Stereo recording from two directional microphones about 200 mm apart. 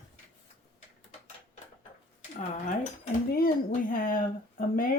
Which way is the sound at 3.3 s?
45° left (ahead or behind).